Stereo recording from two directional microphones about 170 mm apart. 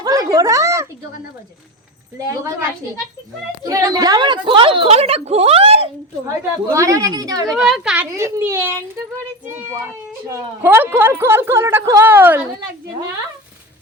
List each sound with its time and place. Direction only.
0.0 s a sound: 20° right (ahead or behind)
2.1 s a woman's voice: 15° right (ahead or behind)
3.6 s a woman's voice: 20° right (ahead or behind); by 5.9 s 35° right (ahead or behind)
6.7 s a woman's voice: 20° right (ahead or behind)
7.5 s a woman's voice: centre (ahead or behind)
7.9 s a woman's voice: 15° right (ahead or behind)
10.2 s a woman's voice: 15° right (ahead or behind)